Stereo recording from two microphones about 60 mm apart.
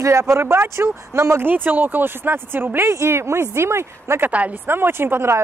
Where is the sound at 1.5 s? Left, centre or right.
Right.